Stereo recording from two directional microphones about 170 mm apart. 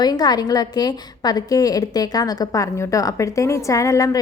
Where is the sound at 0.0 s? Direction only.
25° left (ahead or behind).